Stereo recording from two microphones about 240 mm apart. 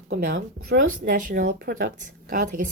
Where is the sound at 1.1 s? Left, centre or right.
Right.